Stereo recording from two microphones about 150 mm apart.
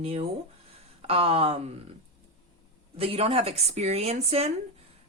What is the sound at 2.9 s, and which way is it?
Speech, 40° right (ahead or behind).